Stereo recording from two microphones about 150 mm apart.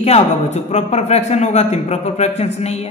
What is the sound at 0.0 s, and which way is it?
A woman's voice, 45° left (ahead or behind).